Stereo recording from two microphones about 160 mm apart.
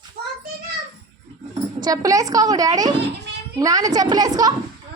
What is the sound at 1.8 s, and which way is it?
A woman's voice, 20° right (ahead or behind).